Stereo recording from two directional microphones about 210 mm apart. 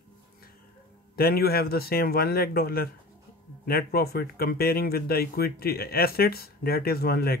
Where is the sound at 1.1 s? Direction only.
45° left (ahead or behind).